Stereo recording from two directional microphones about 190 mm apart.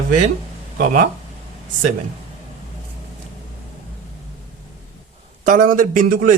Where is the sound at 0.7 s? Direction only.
50° right (ahead or behind).